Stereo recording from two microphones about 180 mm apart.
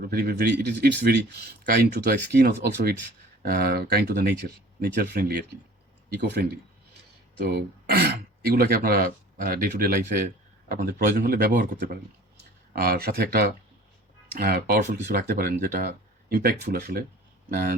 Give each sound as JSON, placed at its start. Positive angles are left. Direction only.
{"t": 0.0, "sound": "speech", "side_deg": -55}
{"t": 7.5, "sound": "speech", "side_deg": -60}